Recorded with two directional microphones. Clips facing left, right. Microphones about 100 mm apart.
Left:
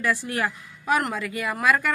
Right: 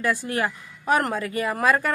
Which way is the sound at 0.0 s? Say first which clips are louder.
Right 1 dB; 30° right (ahead or behind).